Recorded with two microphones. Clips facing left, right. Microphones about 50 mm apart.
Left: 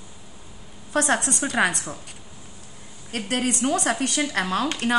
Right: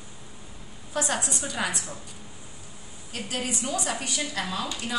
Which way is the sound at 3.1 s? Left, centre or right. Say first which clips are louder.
Left 6 dB; left.